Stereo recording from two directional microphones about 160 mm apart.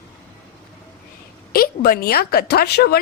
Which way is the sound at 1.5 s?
70° left (ahead or behind).